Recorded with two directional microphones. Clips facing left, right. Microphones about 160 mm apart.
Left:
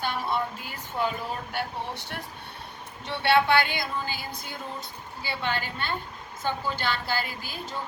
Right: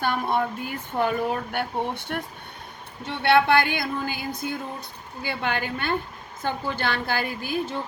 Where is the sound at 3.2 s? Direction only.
55° right (ahead or behind).